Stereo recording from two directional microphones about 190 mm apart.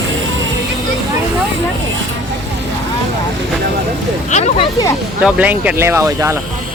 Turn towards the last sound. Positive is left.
turn(degrees=-15)  # may be behind; listen again after turning